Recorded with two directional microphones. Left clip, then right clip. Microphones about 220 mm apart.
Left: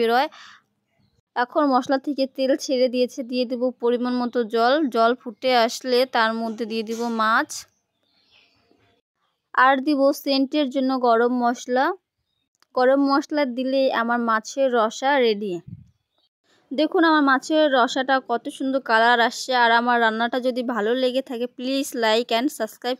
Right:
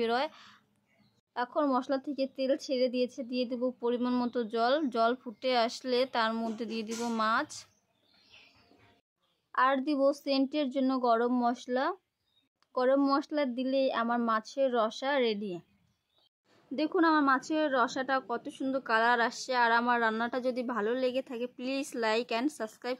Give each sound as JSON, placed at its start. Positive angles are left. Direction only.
{"t": 0.0, "sound": "speech", "side_deg": 30}
{"t": 9.5, "sound": "speech", "side_deg": 35}